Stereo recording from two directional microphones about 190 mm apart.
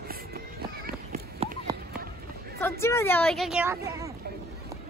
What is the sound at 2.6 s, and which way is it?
Speech, 15° left (ahead or behind).